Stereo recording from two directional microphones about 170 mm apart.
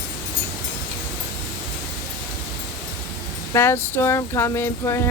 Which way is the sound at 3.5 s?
15° left (ahead or behind).